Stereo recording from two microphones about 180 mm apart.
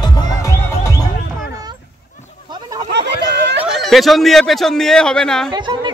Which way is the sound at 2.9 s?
70° right (ahead or behind).